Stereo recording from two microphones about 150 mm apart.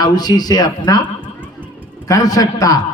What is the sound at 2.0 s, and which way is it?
Speech, 25° left (ahead or behind).